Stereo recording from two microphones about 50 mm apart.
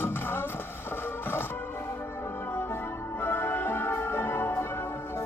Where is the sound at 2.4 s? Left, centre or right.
Left.